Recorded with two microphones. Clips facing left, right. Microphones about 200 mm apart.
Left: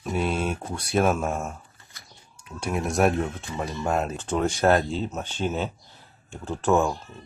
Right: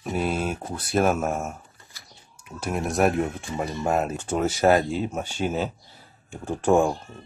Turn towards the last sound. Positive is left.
turn(degrees=-10)  # may be behind; listen again after turning